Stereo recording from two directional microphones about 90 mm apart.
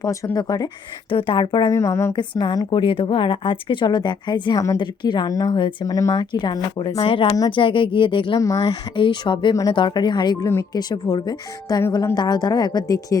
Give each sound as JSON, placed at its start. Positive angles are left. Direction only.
{"t": 0.0, "sound": "speech", "side_deg": 35}
{"t": 1.1, "sound": "a woman's voice", "side_deg": 70}
{"t": 1.6, "sound": "speech", "side_deg": 35}
{"t": 2.1, "sound": "a woman's voice", "side_deg": 60}
{"t": 4.5, "sound": "speech", "side_deg": 40}
{"t": 4.8, "sound": "a woman's voice", "side_deg": 60}
{"t": 5.3, "sound": "speech", "side_deg": 40}
{"t": 6.3, "sound": "a woman's voice", "side_deg": 60}
{"t": 7.0, "sound": "speech", "side_deg": 85}
{"t": 7.5, "sound": "speech", "side_deg": 70}
{"t": 8.4, "sound": "speech", "side_deg": 40}
{"t": 9.0, "sound": "a woman's voice", "side_deg": 65}
{"t": 10.4, "sound": "speech", "side_deg": 30}
{"t": 10.7, "sound": "speech", "side_deg": 50}